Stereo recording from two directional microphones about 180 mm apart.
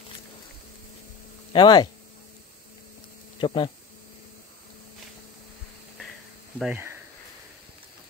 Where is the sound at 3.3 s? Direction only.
30° left (ahead or behind).